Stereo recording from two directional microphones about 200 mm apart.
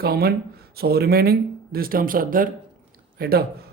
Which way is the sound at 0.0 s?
50° right (ahead or behind).